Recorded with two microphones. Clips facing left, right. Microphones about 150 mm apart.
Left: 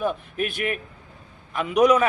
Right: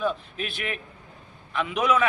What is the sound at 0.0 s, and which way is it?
A man's voice, 50° left (ahead or behind).